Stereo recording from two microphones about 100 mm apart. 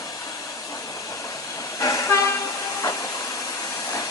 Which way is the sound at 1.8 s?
35° left (ahead or behind).